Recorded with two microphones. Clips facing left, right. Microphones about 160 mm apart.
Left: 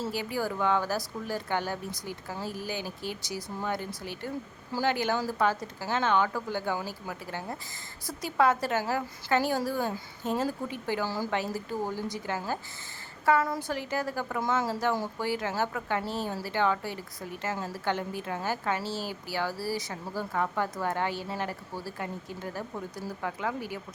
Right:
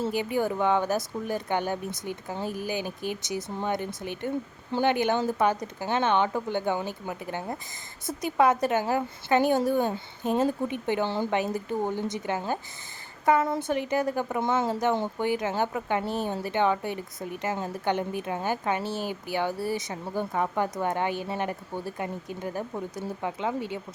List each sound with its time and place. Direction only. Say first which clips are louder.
0.0 s a woman's voice: right 5 dB; 20° right (ahead or behind)